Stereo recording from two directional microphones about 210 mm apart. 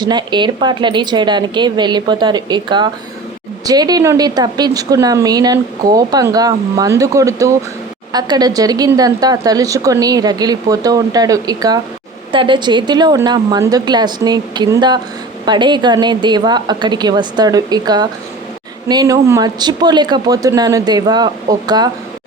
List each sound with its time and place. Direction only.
0.0 s a woman's voice: 20° right (ahead or behind)